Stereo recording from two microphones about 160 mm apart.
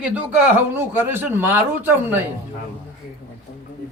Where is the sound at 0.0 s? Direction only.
10° right (ahead or behind).